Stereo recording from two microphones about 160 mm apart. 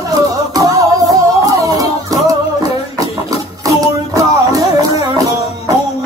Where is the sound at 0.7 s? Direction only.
20° right (ahead or behind).